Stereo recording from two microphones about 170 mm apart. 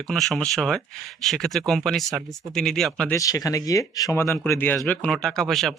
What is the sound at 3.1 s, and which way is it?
Speech, 20° left (ahead or behind).